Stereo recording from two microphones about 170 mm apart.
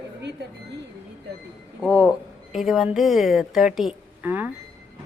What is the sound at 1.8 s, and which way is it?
Speech, 10° right (ahead or behind).